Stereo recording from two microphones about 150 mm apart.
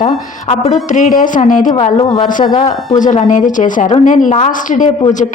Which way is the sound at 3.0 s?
55° left (ahead or behind).